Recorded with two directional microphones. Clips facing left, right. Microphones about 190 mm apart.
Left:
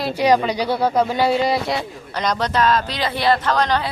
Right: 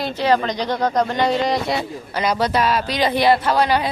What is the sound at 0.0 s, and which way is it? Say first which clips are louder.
Speech: left 2 dB; 10° left (ahead or behind).